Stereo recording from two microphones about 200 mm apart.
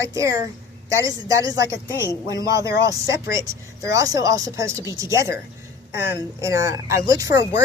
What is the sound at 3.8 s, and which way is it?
A woman's voice, 15° right (ahead or behind).